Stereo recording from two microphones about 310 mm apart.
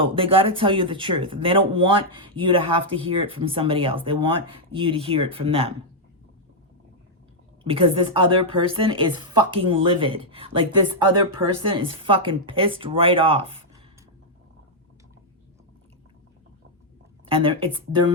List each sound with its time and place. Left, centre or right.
0.0 s a woman's voice: centre
7.6 s a woman's voice: centre
17.2 s speech: centre